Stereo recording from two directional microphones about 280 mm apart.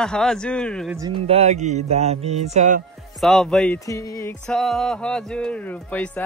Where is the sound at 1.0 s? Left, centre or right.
Right.